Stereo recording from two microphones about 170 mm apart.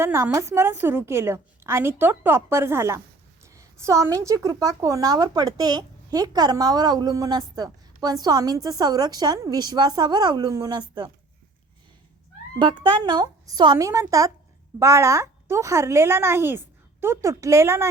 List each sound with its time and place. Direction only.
0.0 s a woman's voice: 15° right (ahead or behind)
12.5 s a woman's voice: 30° right (ahead or behind)